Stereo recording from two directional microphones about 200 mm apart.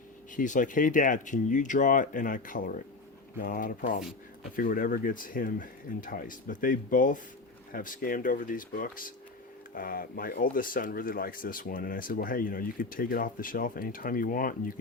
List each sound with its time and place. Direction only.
0.3 s speech: 40° left (ahead or behind)